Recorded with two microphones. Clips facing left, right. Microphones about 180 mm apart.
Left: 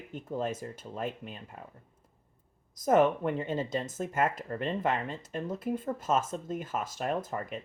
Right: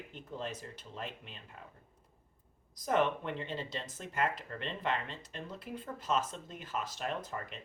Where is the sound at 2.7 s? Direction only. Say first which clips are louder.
Left 7 dB; 45° left (ahead or behind).